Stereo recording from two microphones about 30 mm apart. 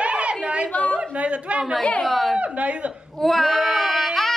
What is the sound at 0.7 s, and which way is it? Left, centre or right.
Speech, left.